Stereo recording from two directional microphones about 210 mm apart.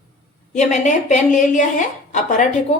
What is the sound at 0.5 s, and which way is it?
A woman's voice, 35° left (ahead or behind).